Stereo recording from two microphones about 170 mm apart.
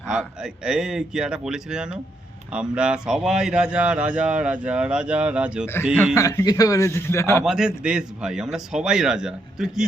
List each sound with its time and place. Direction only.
0.1 s a man's voice: 5° right (ahead or behind)
6.1 s a man's voice: 20° left (ahead or behind)
7.4 s a man's voice: 5° right (ahead or behind)